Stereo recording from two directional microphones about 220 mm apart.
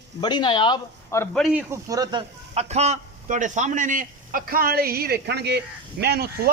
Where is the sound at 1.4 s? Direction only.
5° right (ahead or behind); by 6.5 s 45° right (ahead or behind).